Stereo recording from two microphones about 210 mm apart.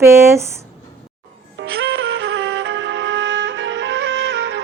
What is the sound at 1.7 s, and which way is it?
Music, 50° right (ahead or behind).